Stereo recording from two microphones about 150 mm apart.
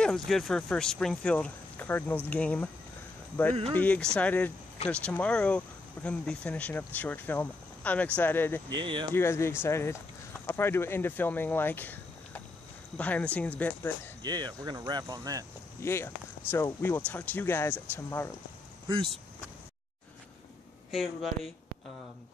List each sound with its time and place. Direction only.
0.0 s speech: centre (ahead or behind)
3.7 s speech: 10° left (ahead or behind)
8.8 s speech: 35° right (ahead or behind)
9.1 s speech: 15° left (ahead or behind)
14.2 s speech: 30° right (ahead or behind)
15.8 s speech: 15° left (ahead or behind)
20.9 s speech: centre (ahead or behind)